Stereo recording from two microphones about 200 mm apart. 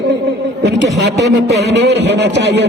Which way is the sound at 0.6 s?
60° right (ahead or behind).